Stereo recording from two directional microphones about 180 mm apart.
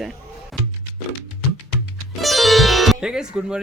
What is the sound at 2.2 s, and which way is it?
Music, centre (ahead or behind).